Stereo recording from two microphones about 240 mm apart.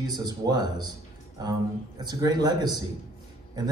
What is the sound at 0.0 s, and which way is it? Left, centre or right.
A man's voice, centre.